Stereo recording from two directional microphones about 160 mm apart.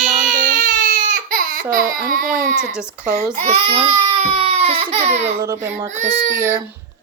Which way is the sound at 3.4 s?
35° right (ahead or behind).